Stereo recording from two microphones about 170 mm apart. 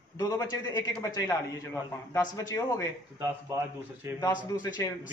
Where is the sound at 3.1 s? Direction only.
15° right (ahead or behind).